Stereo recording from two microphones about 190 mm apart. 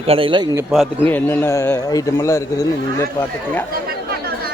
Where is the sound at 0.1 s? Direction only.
25° right (ahead or behind).